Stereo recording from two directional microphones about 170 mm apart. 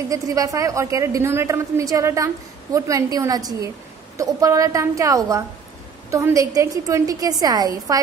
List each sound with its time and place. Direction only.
0.1 s a woman's voice: 20° right (ahead or behind)